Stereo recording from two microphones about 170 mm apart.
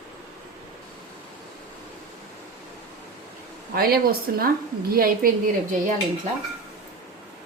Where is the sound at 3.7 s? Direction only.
60° right (ahead or behind).